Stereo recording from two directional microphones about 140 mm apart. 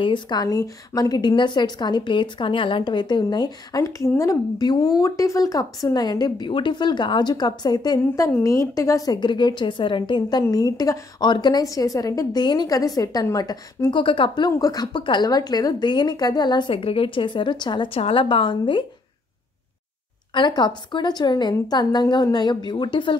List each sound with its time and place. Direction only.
0.0 s a woman's voice: 30° left (ahead or behind)
8.3 s a woman's voice: 20° left (ahead or behind); by 18.9 s 35° left (ahead or behind)
20.3 s a woman's voice: 35° left (ahead or behind)